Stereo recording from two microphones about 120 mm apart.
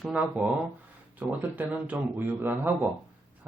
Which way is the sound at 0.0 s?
10° right (ahead or behind).